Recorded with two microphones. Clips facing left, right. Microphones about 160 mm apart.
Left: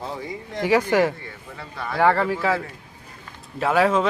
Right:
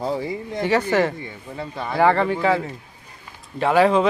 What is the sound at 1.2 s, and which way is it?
Speech, 20° right (ahead or behind).